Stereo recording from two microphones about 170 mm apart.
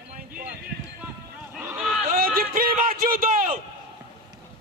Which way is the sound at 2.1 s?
55° right (ahead or behind).